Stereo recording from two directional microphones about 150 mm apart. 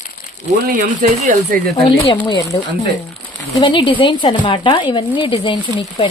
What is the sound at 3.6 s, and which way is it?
Speech, 30° left (ahead or behind).